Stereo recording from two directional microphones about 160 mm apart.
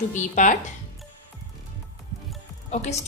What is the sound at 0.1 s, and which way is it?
Speech, 55° left (ahead or behind).